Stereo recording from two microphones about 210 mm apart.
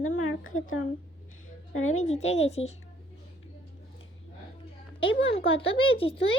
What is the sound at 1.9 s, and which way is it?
Speech, 30° left (ahead or behind).